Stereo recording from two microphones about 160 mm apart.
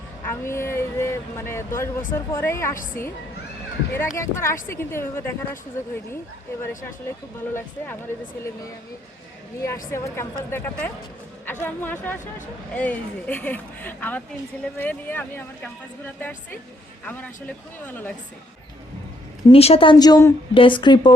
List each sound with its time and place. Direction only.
0.3 s a sound: 15° left (ahead or behind)
2.1 s speech: 15° left (ahead or behind)
7.5 s speech: 15° left (ahead or behind)
19.5 s a woman's voice: 40° left (ahead or behind); by 20.3 s 20° left (ahead or behind)
20.5 s speech: 30° left (ahead or behind)